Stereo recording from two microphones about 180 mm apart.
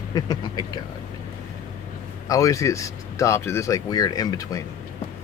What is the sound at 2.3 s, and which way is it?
Speech, 20° left (ahead or behind).